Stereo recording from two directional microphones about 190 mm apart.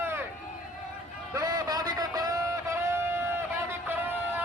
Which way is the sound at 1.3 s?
20° right (ahead or behind).